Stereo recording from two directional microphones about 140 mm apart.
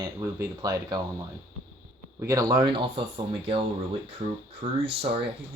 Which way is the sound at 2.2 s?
25° right (ahead or behind).